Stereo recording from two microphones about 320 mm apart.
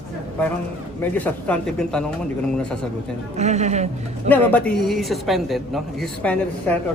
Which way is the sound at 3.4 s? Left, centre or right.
Right.